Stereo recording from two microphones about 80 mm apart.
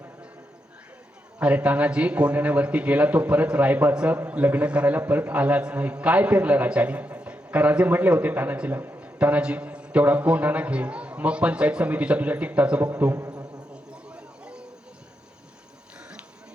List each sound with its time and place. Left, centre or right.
1.4 s a man's voice: centre
13.3 s insect: right
13.9 s a sound: centre